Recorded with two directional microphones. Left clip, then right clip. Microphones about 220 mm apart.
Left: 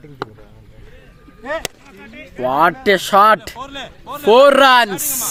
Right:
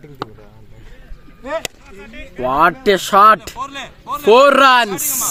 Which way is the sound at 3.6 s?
25° right (ahead or behind).